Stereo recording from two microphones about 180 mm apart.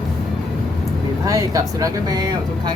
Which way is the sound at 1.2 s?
20° right (ahead or behind).